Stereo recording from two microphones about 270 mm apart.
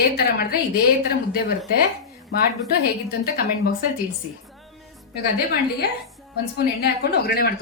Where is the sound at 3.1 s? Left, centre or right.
Left.